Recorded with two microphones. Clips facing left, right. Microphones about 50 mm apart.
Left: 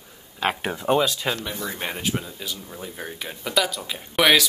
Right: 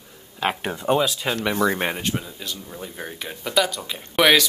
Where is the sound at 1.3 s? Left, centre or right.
Right.